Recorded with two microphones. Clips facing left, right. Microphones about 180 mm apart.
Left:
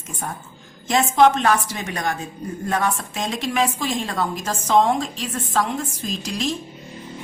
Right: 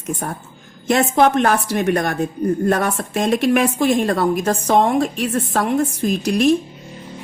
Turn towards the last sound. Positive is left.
turn(degrees=-60)  # may be behind; listen again after turning